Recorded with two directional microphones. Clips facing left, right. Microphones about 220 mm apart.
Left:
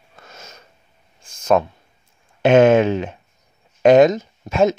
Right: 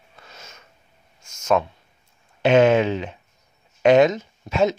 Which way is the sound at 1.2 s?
35° left (ahead or behind).